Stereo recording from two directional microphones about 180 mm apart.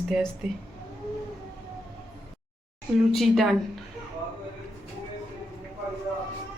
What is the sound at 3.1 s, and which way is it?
Speech, centre (ahead or behind).